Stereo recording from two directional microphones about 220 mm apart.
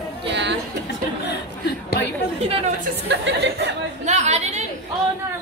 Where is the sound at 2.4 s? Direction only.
25° right (ahead or behind).